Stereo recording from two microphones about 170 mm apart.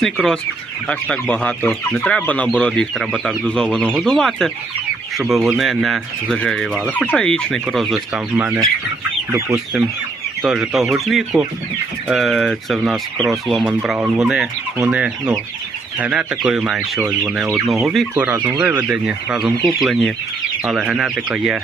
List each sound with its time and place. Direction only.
0.0 s fowl: centre (ahead or behind)
0.9 s chicken: 5° left (ahead or behind)
2.6 s fowl: 5° left (ahead or behind)
9.3 s chicken: 15° right (ahead or behind)
10.4 s fowl: centre (ahead or behind)